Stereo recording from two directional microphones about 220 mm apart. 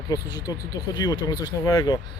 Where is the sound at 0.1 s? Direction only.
15° left (ahead or behind).